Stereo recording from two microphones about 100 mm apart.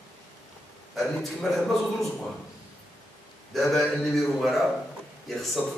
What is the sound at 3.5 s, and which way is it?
A man's voice, centre (ahead or behind).